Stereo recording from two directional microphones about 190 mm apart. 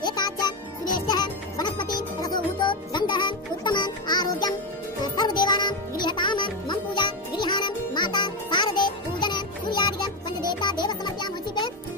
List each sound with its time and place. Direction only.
0.0 s music: 20° left (ahead or behind)